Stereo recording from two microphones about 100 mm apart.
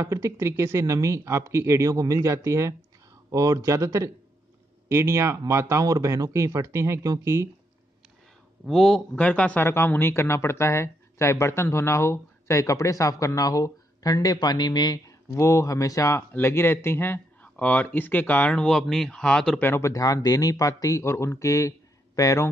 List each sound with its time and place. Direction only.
0.0 s speech: 30° right (ahead or behind)
8.6 s a man's voice: centre (ahead or behind)
9.1 s speech: 10° left (ahead or behind)
19.6 s speech: 25° left (ahead or behind)
19.9 s speech: 35° left (ahead or behind)